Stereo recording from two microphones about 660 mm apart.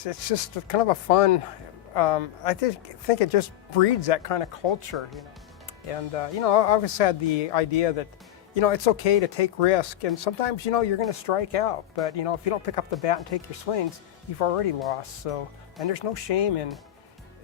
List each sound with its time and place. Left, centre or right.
0.0 s speech: left